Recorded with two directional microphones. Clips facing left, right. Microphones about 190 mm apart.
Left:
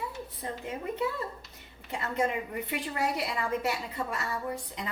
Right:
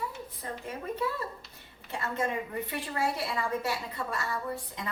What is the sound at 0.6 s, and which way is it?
A woman's voice, 20° left (ahead or behind).